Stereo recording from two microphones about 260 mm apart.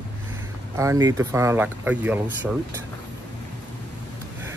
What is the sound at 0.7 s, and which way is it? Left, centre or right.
Speech, centre.